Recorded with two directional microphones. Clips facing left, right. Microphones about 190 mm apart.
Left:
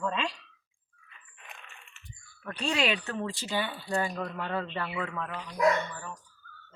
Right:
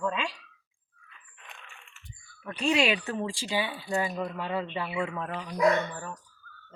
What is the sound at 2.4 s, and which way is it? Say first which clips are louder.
Speech: right 4 dB; 5° right (ahead or behind).